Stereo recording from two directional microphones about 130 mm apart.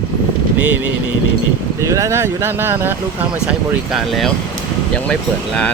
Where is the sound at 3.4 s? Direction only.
5° right (ahead or behind).